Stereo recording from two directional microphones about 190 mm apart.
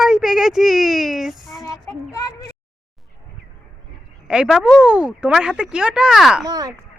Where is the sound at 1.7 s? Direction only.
20° left (ahead or behind).